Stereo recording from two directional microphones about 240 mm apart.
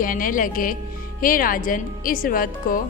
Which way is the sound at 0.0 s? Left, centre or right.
Left.